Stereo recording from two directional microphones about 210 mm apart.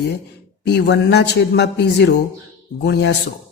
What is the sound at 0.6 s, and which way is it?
A man's voice, 55° left (ahead or behind).